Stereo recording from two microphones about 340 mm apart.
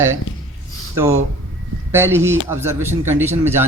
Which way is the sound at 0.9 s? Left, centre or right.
Centre.